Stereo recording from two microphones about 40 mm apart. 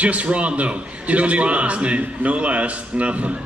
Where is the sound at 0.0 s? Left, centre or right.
Right.